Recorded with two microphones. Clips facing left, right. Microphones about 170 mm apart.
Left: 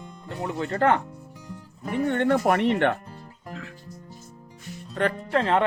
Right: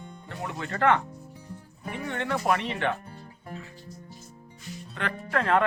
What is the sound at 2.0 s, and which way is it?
Speech, 50° left (ahead or behind).